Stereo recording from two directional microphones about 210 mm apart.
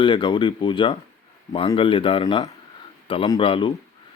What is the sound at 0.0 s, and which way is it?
Speech, 20° left (ahead or behind).